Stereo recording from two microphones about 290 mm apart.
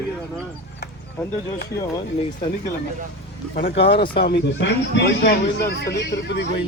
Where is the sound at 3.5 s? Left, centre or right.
Left.